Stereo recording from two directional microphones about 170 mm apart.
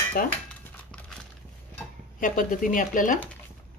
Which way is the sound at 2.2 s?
50° left (ahead or behind).